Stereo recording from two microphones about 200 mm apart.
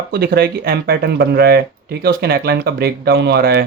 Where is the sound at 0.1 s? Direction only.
55° right (ahead or behind).